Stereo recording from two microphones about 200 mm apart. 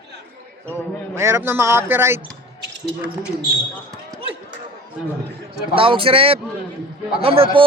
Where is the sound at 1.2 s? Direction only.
10° right (ahead or behind).